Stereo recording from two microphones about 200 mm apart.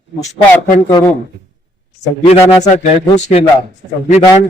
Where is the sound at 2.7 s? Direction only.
35° left (ahead or behind).